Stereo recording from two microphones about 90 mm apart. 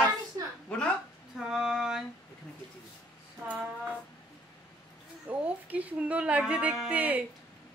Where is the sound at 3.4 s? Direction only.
15° right (ahead or behind).